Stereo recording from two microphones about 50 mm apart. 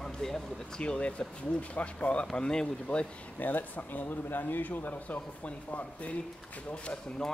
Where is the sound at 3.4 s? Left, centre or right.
Left.